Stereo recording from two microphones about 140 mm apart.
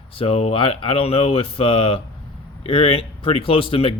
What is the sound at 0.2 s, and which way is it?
Speech, 45° left (ahead or behind).